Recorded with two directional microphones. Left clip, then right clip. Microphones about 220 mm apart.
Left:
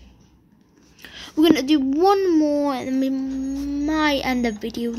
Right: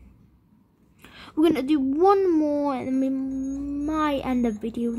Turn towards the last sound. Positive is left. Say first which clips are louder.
# left 2 dB
turn(degrees=-20)  # may be behind; listen again after turning